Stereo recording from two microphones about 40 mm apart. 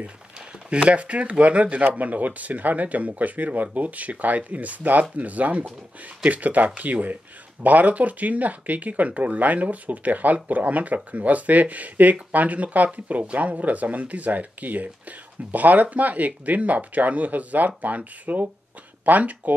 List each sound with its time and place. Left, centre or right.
0.7 s speech: right